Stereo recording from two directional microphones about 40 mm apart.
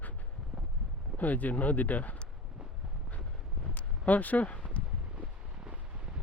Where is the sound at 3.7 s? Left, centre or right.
Left.